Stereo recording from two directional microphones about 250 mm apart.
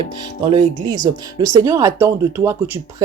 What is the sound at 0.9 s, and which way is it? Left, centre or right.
Speech, centre.